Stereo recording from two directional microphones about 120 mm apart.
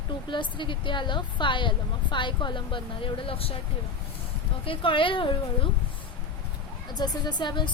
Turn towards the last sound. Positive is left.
turn(degrees=40)  # may be behind; listen again after turning